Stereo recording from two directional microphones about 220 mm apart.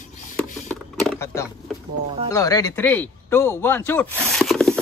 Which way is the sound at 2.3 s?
15° left (ahead or behind).